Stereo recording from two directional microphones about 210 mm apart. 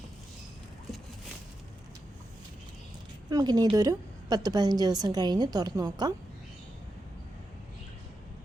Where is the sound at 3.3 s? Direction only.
20° right (ahead or behind).